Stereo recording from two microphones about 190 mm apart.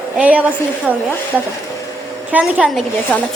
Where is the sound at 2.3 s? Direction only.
10° right (ahead or behind).